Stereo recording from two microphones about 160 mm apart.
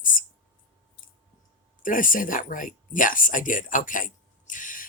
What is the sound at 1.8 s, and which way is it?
Speech, 55° left (ahead or behind).